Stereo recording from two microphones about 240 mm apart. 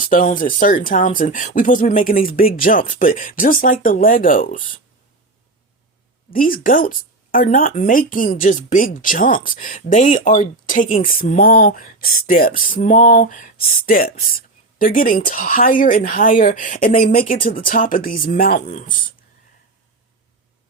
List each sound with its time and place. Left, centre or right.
0.0 s speech: left
6.3 s speech: left